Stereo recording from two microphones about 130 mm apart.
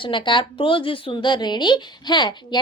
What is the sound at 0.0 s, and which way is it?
Speech, 40° left (ahead or behind).